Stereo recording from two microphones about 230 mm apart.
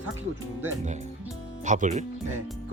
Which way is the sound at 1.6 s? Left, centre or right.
Right.